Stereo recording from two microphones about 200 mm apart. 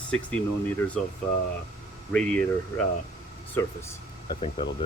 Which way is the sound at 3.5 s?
15° left (ahead or behind).